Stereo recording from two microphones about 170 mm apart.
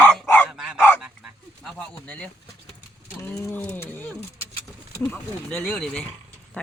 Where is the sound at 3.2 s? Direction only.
15° left (ahead or behind).